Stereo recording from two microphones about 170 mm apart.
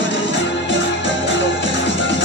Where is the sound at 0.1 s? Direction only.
90° left.